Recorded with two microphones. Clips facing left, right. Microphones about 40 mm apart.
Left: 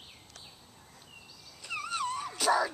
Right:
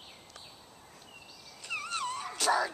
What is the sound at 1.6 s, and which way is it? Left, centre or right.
Wail, centre.